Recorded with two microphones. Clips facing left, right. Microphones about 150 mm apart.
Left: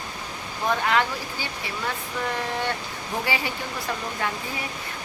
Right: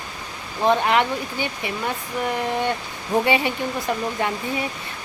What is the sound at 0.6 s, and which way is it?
Speech, 25° right (ahead or behind).